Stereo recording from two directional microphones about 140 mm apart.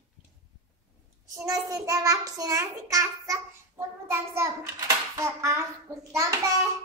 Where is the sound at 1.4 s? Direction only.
25° right (ahead or behind).